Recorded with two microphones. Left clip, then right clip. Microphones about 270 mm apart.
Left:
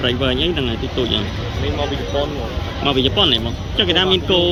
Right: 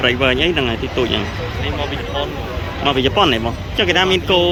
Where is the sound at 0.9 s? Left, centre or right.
Right.